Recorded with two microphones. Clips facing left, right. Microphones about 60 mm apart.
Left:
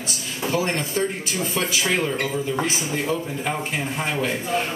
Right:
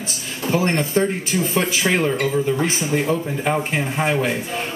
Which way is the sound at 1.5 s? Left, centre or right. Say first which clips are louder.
Right 3 dB; right.